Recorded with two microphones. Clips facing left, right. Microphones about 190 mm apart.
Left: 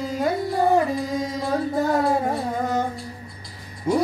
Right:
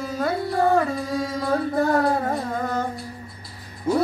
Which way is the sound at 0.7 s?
20° left (ahead or behind).